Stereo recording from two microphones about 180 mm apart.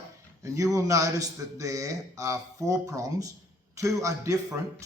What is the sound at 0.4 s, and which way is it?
A man's voice, 20° right (ahead or behind).